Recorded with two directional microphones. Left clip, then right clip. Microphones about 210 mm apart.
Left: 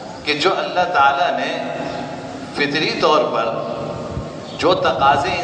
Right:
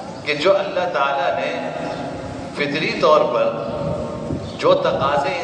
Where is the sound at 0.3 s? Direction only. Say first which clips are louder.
Right 1 dB; 40° left (ahead or behind).